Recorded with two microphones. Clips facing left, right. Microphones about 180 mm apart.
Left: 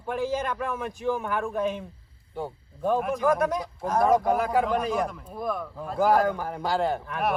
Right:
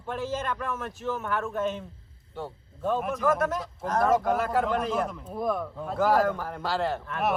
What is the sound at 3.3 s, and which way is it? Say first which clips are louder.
A man's voice: left 2 dB; 15° left (ahead or behind).